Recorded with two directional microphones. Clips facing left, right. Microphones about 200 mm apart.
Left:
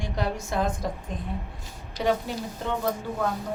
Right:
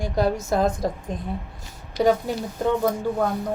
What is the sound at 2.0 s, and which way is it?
Speech, 65° right (ahead or behind).